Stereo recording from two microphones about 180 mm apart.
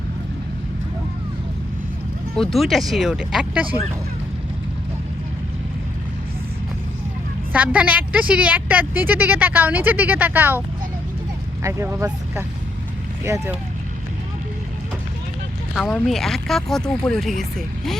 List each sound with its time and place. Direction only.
2.3 s speech: centre (ahead or behind)
7.5 s a woman's voice: 10° right (ahead or behind)
11.6 s a woman's voice: 15° right (ahead or behind)
15.7 s speech: centre (ahead or behind)